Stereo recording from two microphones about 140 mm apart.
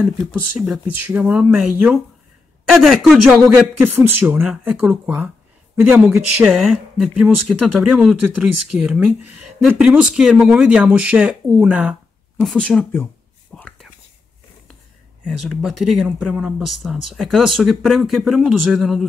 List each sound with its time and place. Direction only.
0.0 s speech: 5° right (ahead or behind)
2.7 s speech: centre (ahead or behind)
3.3 s speech: 10° right (ahead or behind)
12.5 s speech: 10° left (ahead or behind)
13.6 s whispering: 10° left (ahead or behind)
15.2 s speech: centre (ahead or behind)